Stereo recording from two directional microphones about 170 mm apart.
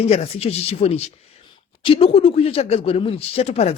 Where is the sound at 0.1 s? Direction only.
35° left (ahead or behind).